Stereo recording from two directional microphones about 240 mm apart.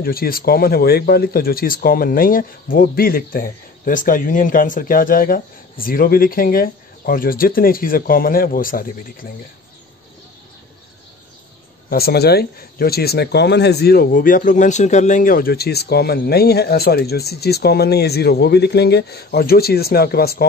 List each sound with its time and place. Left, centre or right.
0.0 s speech: left
11.9 s speech: left